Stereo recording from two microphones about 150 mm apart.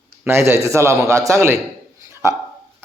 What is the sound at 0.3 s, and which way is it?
A man's voice, 15° right (ahead or behind).